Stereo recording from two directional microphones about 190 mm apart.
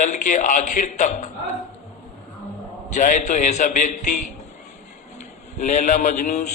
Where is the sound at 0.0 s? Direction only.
40° left (ahead or behind).